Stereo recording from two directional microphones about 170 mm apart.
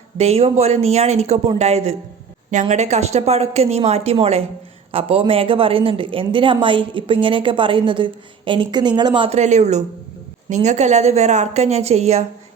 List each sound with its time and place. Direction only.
0.2 s speech: 40° right (ahead or behind)
9.3 s speech: 45° right (ahead or behind)